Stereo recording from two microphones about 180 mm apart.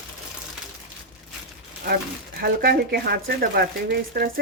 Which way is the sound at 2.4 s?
60° right (ahead or behind).